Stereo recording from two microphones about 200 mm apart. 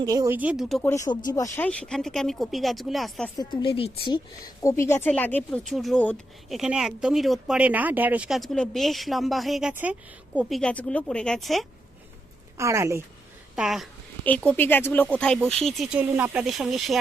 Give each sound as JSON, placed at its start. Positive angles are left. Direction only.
{"t": 0.0, "sound": "speech", "side_deg": -20}
{"t": 0.9, "sound": "a woman's voice", "side_deg": 15}
{"t": 3.3, "sound": "a woman's voice", "side_deg": 20}
{"t": 12.5, "sound": "speech", "side_deg": -15}
{"t": 13.6, "sound": "a woman's voice", "side_deg": 0}